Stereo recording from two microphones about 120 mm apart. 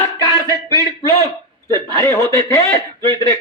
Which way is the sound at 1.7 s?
25° left (ahead or behind).